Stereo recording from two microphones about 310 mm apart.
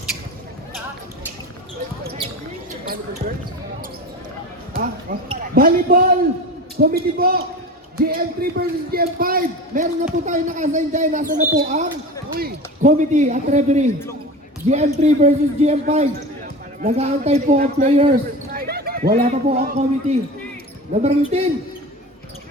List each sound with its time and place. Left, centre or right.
2.8 s basketball bounce: right
5.5 s a man's voice: right